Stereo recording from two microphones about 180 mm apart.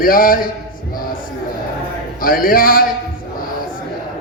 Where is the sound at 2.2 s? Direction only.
55° left (ahead or behind).